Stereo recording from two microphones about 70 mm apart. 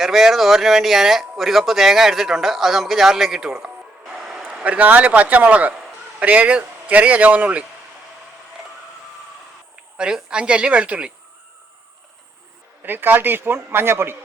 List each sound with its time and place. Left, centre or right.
0.0 s speech: centre
4.5 s a man's voice: centre
10.0 s a woman's voice: centre
12.8 s a man's voice: right